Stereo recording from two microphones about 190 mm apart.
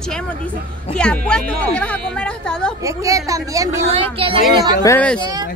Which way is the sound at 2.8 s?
15° right (ahead or behind).